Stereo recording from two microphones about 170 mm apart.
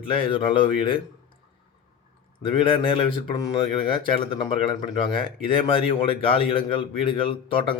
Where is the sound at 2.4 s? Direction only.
30° left (ahead or behind).